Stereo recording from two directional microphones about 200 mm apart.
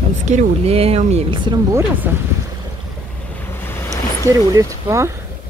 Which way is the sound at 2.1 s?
10° right (ahead or behind).